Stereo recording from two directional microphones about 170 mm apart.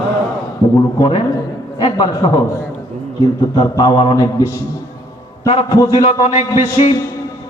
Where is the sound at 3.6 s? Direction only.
30° left (ahead or behind).